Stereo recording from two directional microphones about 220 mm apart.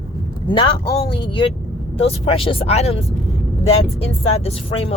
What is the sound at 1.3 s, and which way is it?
Speech, 20° left (ahead or behind).